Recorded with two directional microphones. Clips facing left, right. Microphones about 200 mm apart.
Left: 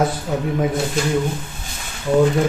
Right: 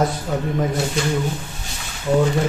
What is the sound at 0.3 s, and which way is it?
Speech, 5° left (ahead or behind).